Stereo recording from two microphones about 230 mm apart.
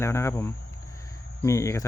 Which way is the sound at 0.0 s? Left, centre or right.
Centre.